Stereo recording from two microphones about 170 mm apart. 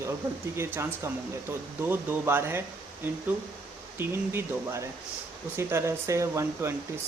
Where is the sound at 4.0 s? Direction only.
15° right (ahead or behind).